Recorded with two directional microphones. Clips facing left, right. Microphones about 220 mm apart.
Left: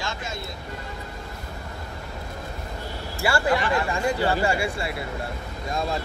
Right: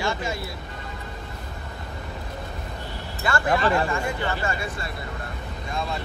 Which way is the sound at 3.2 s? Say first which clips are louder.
Even; 10° left (ahead or behind).